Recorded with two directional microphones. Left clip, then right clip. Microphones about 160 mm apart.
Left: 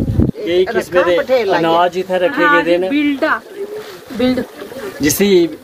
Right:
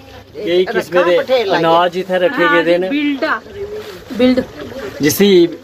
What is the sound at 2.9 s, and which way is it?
Speech, 70° left (ahead or behind).